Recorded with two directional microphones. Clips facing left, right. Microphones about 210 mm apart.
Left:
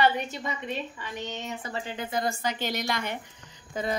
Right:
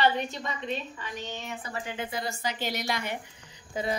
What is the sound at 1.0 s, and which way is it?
Speech, 20° left (ahead or behind).